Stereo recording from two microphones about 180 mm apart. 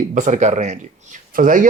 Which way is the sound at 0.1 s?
45° right (ahead or behind).